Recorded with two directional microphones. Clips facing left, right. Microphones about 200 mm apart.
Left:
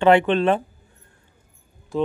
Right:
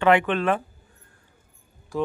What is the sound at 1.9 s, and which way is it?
Speech, 25° left (ahead or behind).